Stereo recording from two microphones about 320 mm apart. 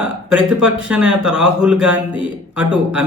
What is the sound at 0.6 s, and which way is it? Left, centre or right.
Speech, centre.